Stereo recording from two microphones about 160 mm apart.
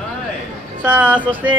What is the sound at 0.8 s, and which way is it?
Speech, 10° right (ahead or behind).